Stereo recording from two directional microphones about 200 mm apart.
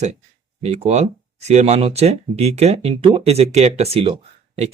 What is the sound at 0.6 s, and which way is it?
Speech, 30° right (ahead or behind).